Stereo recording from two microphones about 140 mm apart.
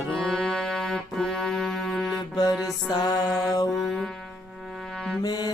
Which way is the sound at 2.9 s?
30° left (ahead or behind).